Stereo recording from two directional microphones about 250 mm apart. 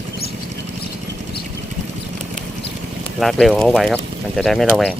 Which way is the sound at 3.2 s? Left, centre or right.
Centre.